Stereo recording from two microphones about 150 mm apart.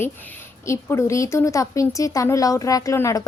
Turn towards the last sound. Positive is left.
turn(degrees=20)  # may be behind; listen again after turning